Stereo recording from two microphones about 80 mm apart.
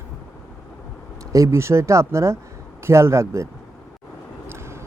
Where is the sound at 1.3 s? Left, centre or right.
Right.